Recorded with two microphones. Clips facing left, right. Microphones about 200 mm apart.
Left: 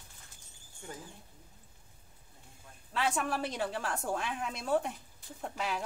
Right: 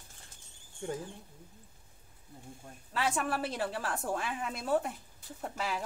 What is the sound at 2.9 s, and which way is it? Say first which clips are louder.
A woman's voice: even; centre (ahead or behind).